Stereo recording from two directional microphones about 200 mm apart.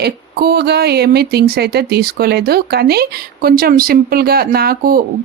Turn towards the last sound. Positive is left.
turn(degrees=-50)  # may be behind; listen again after turning